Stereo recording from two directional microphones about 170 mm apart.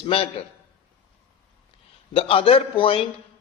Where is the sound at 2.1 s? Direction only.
35° left (ahead or behind).